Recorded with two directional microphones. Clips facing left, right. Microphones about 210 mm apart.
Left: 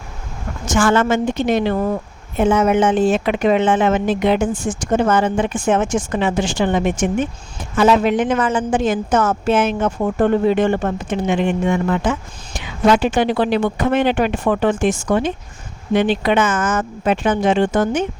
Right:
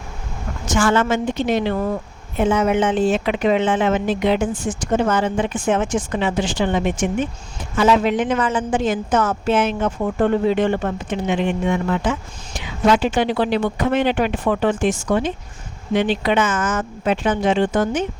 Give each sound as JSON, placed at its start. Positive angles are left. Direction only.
{"t": 0.7, "sound": "speech", "side_deg": 50}